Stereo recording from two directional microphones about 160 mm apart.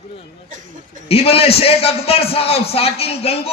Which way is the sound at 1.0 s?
40° left (ahead or behind).